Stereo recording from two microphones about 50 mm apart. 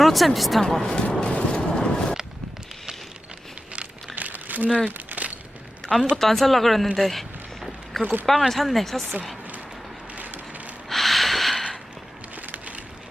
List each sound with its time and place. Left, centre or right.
0.0 s a woman's voice: centre
0.6 s a woman's voice: centre
1.1 s skateboard: centre
3.7 s crumpling: right
5.8 s speech: centre
6.9 s a sound: centre
8.3 s speech: centre
10.8 s snort: centre
12.4 s a sound: right